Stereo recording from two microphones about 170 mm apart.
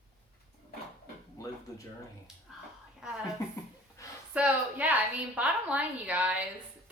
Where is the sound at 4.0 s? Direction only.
20° left (ahead or behind).